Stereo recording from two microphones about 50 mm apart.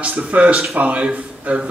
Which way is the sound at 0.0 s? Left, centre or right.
Right.